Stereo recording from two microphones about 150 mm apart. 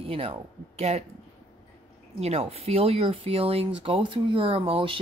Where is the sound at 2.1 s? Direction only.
45° right (ahead or behind).